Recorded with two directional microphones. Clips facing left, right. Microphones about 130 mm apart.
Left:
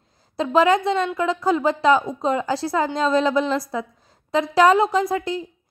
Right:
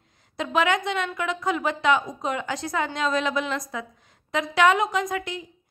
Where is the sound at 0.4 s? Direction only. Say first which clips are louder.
Left 6 dB; 35° left (ahead or behind).